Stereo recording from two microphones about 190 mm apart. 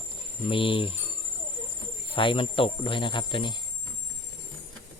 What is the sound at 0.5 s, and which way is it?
Speech, 30° left (ahead or behind).